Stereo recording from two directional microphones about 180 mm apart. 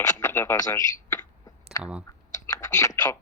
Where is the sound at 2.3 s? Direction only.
15° left (ahead or behind).